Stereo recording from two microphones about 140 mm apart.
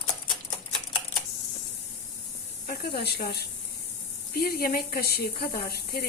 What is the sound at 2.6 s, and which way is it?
Speech, 90° left.